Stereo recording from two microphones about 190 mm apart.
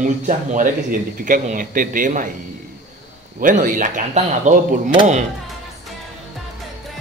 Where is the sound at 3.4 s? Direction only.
45° right (ahead or behind).